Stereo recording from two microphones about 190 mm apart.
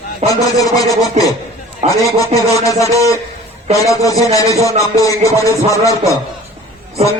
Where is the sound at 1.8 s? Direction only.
35° right (ahead or behind).